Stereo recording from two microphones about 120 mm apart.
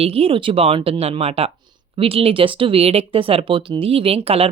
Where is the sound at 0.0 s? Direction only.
55° right (ahead or behind).